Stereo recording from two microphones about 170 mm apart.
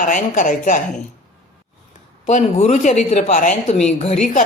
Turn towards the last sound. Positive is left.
turn(degrees=40)  # may be behind; listen again after turning